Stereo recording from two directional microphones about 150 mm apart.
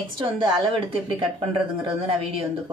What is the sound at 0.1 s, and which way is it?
A woman's voice, 35° right (ahead or behind).